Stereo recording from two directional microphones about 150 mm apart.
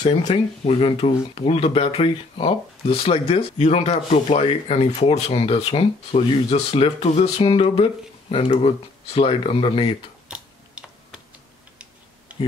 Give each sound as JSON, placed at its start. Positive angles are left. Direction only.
{"t": 0.3, "sound": "speech", "side_deg": 40}
{"t": 10.2, "sound": "typing", "side_deg": -5}
{"t": 12.3, "sound": "a sound", "side_deg": -10}